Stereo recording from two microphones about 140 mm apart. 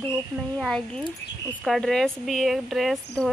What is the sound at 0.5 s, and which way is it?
Speech, 5° left (ahead or behind).